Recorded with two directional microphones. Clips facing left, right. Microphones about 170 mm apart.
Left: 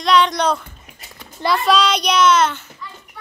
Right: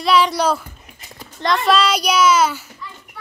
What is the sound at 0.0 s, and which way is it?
Speech, 5° right (ahead or behind).